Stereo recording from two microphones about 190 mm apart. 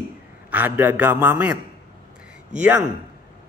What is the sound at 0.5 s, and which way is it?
A man's voice, 10° right (ahead or behind).